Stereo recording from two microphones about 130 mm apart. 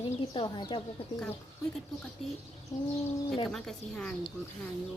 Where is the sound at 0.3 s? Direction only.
35° left (ahead or behind).